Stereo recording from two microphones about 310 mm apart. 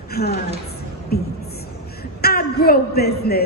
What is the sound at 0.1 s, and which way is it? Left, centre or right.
A woman's voice, left.